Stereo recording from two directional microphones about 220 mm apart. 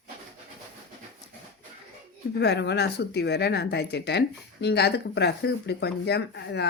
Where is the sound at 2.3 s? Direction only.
50° left (ahead or behind).